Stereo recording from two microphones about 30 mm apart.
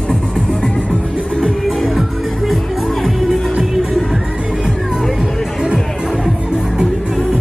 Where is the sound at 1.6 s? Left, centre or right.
Centre.